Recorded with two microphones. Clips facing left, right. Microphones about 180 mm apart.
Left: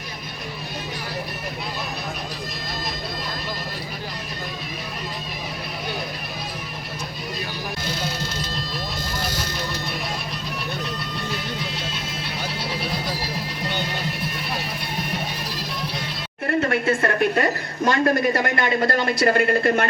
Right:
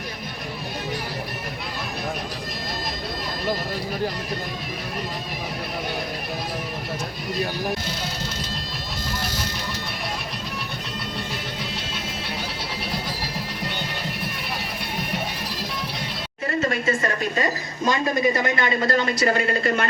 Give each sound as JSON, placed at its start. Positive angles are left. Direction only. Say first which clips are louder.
{"t": 16.5, "sound": "a woman's voice", "louder": "left 3 dB", "side_deg": 60}